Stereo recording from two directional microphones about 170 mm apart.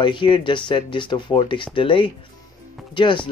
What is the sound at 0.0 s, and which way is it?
Speech, 30° left (ahead or behind).